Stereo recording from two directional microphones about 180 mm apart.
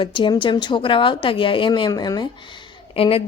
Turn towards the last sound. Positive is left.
turn(degrees=30)  # may be behind; listen again after turning